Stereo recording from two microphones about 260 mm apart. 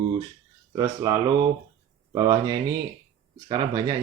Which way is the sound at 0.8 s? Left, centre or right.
Centre.